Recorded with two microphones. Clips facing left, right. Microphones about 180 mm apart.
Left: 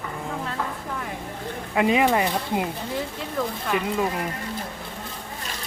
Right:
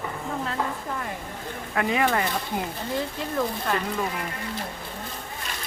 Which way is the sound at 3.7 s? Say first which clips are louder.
Left 6 dB; 15° left (ahead or behind).